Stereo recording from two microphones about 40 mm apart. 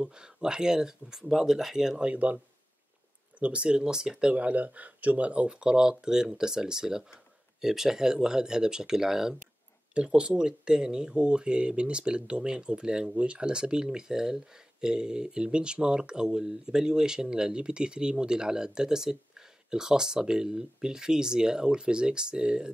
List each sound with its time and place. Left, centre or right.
0.0 s speech: centre
3.3 s speech: right
3.6 s speech: centre
4.3 s speech: right; by 9.4 s centre
9.9 s speech: right